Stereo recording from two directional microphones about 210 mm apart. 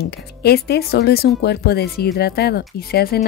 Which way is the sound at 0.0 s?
50° left (ahead or behind).